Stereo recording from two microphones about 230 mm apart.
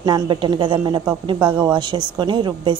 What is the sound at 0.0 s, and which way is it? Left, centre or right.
A woman's voice, centre.